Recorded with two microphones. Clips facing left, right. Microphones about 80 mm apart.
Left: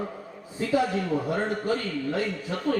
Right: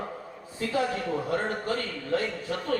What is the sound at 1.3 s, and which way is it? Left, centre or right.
Speech, centre.